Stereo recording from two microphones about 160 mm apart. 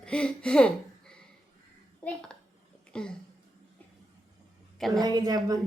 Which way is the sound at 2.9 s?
5° left (ahead or behind).